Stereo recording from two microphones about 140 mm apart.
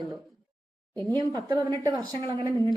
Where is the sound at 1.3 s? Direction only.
30° right (ahead or behind).